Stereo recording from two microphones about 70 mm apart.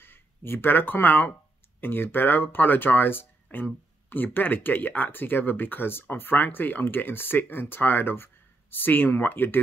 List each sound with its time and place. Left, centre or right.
0.0 s speech: left